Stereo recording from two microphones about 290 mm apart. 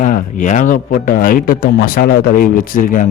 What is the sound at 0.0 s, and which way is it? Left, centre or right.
Speech, left.